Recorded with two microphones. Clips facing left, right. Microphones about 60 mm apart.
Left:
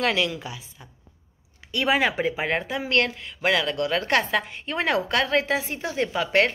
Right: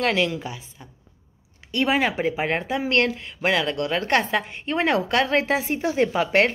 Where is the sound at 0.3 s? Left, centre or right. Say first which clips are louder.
Right 3 dB; centre.